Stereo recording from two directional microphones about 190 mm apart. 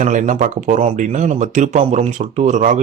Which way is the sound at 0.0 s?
40° right (ahead or behind).